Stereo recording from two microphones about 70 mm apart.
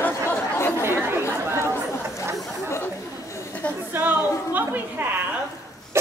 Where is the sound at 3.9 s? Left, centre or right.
Right.